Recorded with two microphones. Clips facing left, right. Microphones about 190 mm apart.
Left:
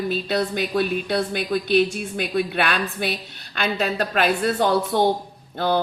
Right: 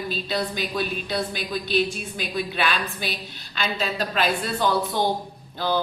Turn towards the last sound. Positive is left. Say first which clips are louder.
# left 3 dB
turn(degrees=55)  # may be behind; listen again after turning